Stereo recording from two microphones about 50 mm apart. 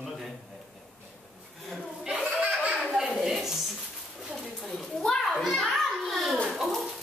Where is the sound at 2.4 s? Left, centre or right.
Right.